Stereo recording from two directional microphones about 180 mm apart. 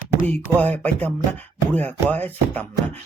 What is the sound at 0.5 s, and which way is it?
Speech, 10° left (ahead or behind).